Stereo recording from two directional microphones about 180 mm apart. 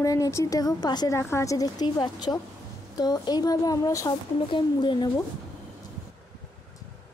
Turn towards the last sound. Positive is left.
turn(degrees=25)  # may be behind; listen again after turning